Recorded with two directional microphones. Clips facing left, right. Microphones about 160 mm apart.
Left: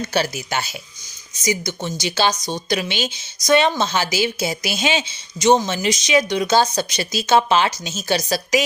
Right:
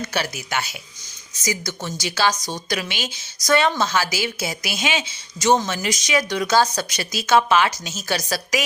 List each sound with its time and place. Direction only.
0.0 s a woman's voice: 30° left (ahead or behind)